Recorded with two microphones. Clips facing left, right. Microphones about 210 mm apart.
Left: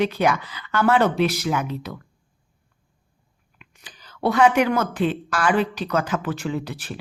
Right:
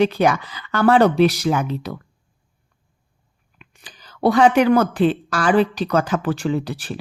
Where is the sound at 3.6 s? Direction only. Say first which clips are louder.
Right 2 dB; 30° right (ahead or behind).